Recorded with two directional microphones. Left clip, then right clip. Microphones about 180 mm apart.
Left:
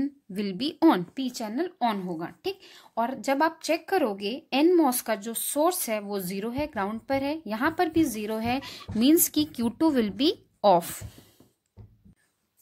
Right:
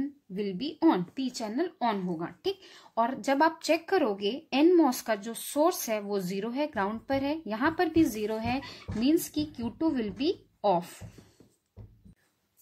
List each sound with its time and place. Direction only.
0.0 s a woman's voice: 45° left (ahead or behind)